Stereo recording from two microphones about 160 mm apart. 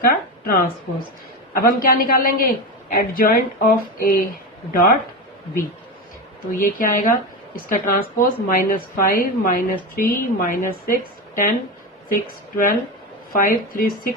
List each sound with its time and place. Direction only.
0.0 s a man's voice: 70° left (ahead or behind)
6.6 s a man's voice: 60° left (ahead or behind)